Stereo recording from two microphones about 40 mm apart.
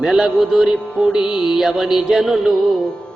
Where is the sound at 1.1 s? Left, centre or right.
Centre.